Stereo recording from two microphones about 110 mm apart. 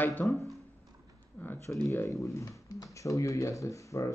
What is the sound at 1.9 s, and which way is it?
Speech, 25° left (ahead or behind).